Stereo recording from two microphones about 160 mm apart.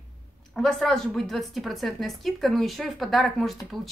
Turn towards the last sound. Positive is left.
turn(degrees=0)  # may be behind; listen again after turning